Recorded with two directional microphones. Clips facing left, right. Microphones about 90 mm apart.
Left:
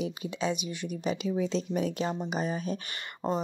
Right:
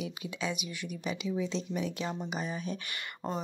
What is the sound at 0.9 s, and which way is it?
Speech, 45° left (ahead or behind).